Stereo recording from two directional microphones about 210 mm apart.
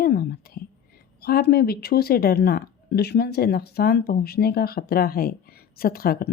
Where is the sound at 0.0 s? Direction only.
45° left (ahead or behind).